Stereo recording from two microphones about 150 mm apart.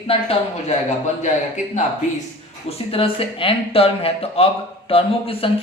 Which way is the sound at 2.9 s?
40° left (ahead or behind).